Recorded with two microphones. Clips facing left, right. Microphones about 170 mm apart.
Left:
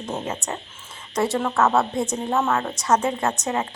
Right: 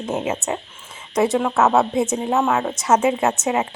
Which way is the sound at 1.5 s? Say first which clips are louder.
Right 3 dB; 20° right (ahead or behind).